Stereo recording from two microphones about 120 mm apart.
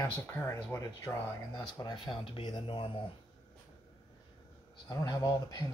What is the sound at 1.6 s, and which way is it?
Speech, 35° left (ahead or behind).